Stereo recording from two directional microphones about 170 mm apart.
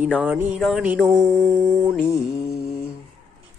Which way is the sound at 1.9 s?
5° right (ahead or behind).